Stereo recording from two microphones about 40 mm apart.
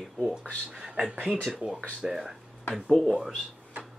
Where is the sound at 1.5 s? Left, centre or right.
Centre.